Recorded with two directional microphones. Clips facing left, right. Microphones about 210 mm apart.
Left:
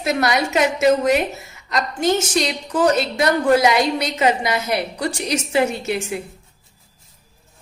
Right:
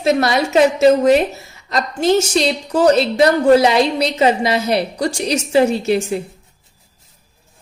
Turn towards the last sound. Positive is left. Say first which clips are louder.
# right 7 dB
turn(degrees=-30)  # may be behind; listen again after turning